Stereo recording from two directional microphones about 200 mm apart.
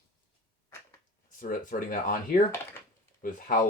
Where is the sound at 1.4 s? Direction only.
45° left (ahead or behind).